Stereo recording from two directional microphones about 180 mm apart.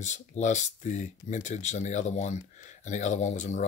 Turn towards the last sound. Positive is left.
turn(degrees=40)  # may be behind; listen again after turning